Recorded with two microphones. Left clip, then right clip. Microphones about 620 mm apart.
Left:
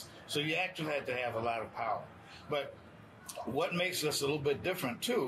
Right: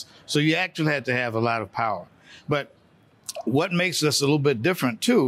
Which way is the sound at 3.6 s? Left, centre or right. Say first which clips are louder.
Right 7 dB; right.